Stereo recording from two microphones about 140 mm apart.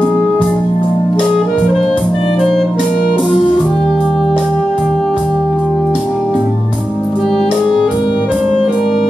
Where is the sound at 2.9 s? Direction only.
70° left (ahead or behind).